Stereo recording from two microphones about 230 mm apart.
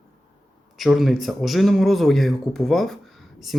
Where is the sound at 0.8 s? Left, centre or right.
Centre.